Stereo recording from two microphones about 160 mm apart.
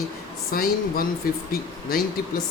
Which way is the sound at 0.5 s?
65° left (ahead or behind).